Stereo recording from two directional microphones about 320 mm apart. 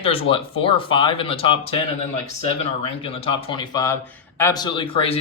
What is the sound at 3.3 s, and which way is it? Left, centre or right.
Speech, centre.